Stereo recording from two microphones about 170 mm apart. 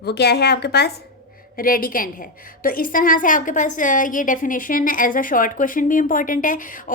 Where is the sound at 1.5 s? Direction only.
60° left (ahead or behind).